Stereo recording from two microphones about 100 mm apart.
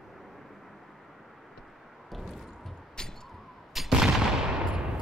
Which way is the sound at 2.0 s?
Centre (ahead or behind).